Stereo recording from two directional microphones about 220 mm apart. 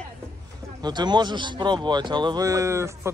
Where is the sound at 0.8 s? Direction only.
20° right (ahead or behind).